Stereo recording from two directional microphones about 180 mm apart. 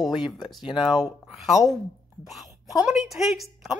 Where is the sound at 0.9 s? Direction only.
5° right (ahead or behind).